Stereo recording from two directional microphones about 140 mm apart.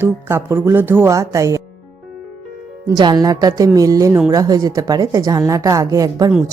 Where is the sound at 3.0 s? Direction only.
30° right (ahead or behind).